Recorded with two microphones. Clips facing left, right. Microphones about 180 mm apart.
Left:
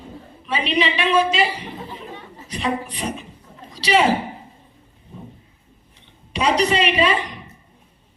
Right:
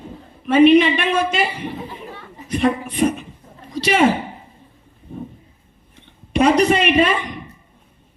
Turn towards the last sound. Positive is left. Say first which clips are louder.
# right 3 dB
turn(degrees=-50)  # may be behind; listen again after turning